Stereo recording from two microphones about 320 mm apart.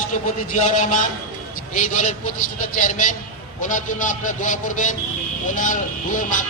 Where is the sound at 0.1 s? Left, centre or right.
Left.